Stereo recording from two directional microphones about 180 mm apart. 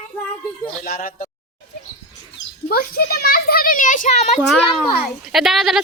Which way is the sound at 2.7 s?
55° left (ahead or behind).